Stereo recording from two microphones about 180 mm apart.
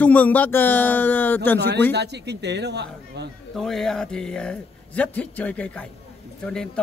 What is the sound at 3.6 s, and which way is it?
Speech, centre (ahead or behind).